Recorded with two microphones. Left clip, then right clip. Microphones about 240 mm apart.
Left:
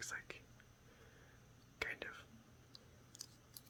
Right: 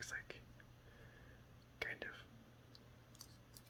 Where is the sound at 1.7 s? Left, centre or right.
Centre.